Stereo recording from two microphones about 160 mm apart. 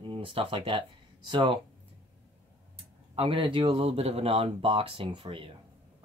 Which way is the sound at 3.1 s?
35° right (ahead or behind).